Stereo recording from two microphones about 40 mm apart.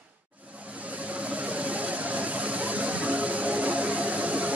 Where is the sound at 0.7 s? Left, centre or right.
Right.